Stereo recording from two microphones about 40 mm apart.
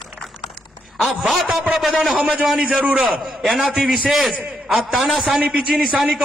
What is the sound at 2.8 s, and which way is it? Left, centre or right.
Speech, right.